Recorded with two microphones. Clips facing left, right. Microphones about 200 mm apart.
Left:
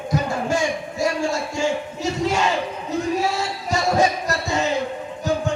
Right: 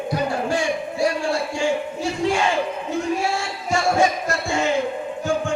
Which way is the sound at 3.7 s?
40° left (ahead or behind).